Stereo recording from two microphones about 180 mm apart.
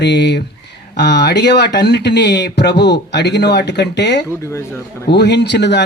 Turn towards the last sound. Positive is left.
turn(degrees=70)  # may be behind; listen again after turning